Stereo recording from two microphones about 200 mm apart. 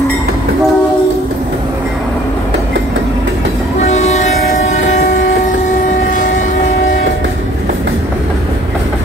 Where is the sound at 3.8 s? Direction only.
35° left (ahead or behind).